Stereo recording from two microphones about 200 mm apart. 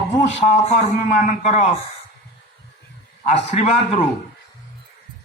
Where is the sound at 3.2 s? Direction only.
35° left (ahead or behind).